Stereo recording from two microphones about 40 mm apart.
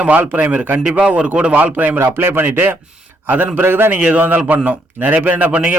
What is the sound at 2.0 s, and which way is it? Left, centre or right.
Speech, right.